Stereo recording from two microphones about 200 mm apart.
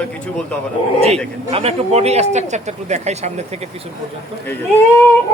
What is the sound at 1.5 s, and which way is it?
A man's voice, 30° right (ahead or behind).